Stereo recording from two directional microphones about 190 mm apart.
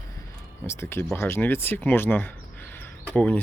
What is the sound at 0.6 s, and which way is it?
Speech, 15° left (ahead or behind).